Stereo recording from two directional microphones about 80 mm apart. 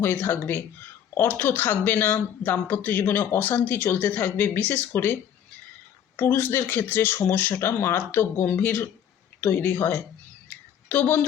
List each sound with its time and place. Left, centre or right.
0.0 s speech: left
6.1 s a woman's voice: left